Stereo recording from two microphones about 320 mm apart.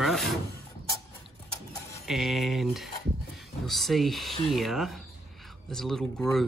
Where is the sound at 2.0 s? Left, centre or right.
Centre.